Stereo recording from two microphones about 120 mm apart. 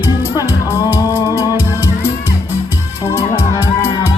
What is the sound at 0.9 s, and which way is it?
Music, 20° left (ahead or behind).